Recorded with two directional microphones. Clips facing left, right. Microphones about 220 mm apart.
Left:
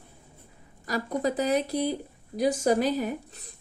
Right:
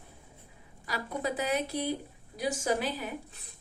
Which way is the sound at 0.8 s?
40° left (ahead or behind).